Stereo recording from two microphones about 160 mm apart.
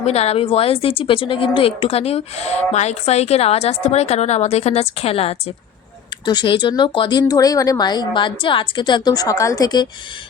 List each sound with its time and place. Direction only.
0.0 s a woman's voice: 40° left (ahead or behind)